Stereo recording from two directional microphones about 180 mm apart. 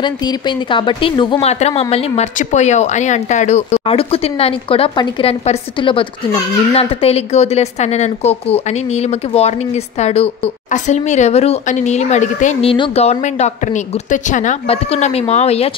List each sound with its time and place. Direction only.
0.0 s speech: 25° left (ahead or behind); by 12.7 s 45° left (ahead or behind)
12.7 s speech: 30° left (ahead or behind)